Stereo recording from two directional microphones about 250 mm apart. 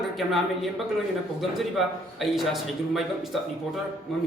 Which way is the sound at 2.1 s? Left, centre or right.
Centre.